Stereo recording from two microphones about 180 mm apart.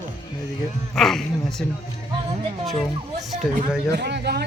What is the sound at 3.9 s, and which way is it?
Speech, 65° right (ahead or behind).